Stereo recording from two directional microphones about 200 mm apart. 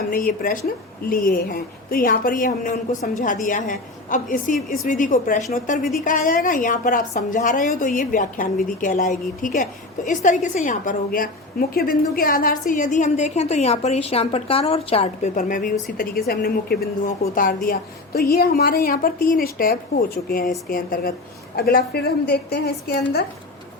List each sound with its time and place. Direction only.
0.1 s a woman's voice: 50° left (ahead or behind)